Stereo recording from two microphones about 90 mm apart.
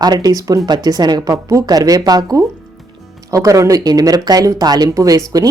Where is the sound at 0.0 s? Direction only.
50° right (ahead or behind).